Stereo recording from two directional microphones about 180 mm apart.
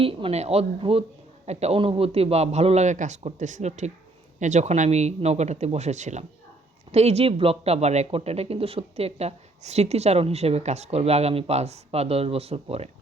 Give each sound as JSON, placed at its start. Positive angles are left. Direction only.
{"t": 0.0, "sound": "speech", "side_deg": -30}